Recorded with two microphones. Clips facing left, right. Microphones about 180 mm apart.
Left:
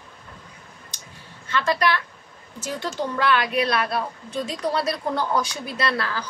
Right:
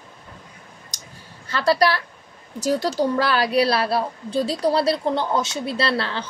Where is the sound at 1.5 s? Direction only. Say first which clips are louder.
Right 3 dB; 35° right (ahead or behind).